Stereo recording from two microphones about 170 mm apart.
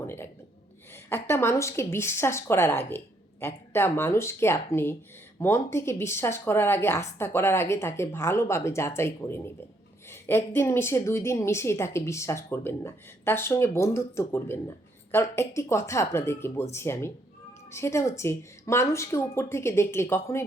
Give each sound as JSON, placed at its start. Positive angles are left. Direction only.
{"t": 0.0, "sound": "a woman's voice", "side_deg": 15}